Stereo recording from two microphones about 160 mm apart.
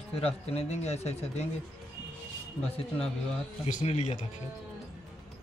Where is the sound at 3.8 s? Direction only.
45° left (ahead or behind).